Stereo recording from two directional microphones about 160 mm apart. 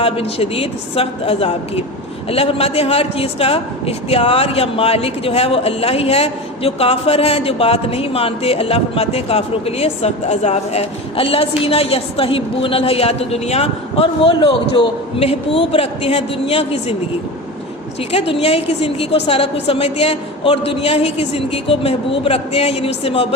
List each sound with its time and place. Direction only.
0.0 s a man's voice: 35° left (ahead or behind)
18.1 s a man's voice: 40° left (ahead or behind)